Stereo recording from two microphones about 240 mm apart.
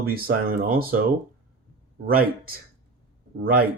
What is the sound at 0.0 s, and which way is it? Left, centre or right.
Speech, right.